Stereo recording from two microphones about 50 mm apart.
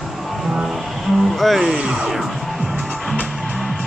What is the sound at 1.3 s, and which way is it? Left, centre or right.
Speech, centre.